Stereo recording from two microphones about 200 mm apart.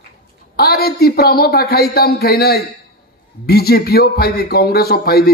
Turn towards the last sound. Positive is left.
turn(degrees=50)  # may be behind; listen again after turning